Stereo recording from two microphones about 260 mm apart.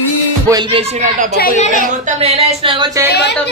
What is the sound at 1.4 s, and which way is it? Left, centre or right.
Speech, left.